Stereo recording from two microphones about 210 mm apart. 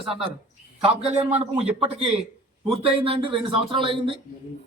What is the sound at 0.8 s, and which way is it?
Speech, 30° right (ahead or behind).